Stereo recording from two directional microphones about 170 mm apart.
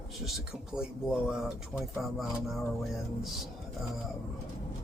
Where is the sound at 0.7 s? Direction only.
5° right (ahead or behind).